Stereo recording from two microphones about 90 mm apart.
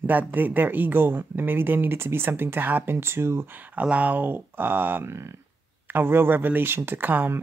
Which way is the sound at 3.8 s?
15° right (ahead or behind).